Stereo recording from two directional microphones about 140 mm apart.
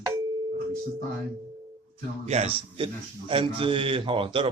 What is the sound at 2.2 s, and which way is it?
A man's voice, 50° right (ahead or behind).